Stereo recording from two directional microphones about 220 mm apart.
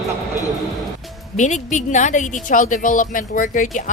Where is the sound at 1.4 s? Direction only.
35° left (ahead or behind).